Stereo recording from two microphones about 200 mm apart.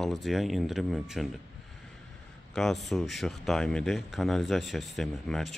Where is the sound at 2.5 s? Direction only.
Centre (ahead or behind).